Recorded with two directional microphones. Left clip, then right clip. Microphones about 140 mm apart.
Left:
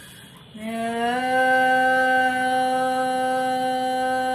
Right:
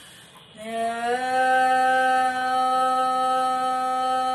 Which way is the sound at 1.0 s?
10° right (ahead or behind).